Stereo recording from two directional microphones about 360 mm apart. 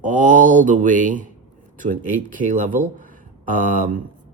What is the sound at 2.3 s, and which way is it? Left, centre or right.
Speech, right.